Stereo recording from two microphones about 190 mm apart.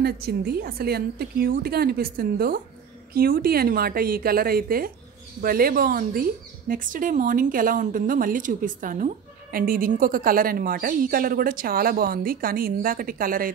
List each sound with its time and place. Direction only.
0.0 s a woman's voice: 55° right (ahead or behind)